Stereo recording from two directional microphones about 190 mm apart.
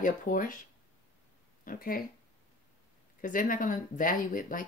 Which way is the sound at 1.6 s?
50° left (ahead or behind).